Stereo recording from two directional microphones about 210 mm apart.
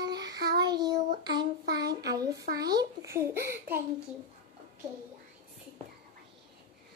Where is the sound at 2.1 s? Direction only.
15° right (ahead or behind).